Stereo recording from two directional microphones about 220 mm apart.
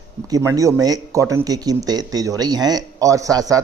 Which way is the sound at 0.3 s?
15° right (ahead or behind).